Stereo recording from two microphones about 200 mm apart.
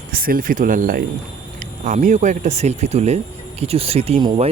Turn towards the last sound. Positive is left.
turn(degrees=-25)  # may be behind; listen again after turning